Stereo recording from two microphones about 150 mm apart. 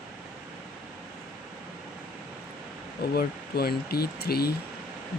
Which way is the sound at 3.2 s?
90° left.